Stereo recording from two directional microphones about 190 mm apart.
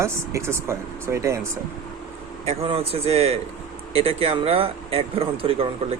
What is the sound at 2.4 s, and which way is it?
A man's voice, 30° right (ahead or behind).